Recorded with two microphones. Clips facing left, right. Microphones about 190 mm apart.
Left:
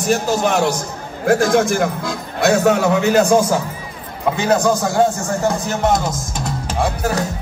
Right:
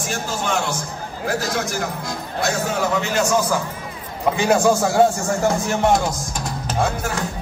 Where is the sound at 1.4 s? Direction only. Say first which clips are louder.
Left 9 dB; 55° left (ahead or behind).